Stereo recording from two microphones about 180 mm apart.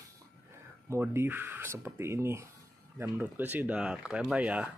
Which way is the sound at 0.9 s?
15° right (ahead or behind).